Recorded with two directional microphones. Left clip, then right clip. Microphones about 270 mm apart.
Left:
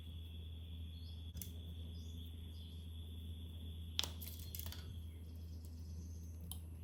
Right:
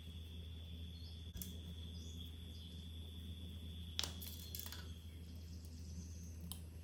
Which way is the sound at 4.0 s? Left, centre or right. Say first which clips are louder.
Left 2 dB; centre.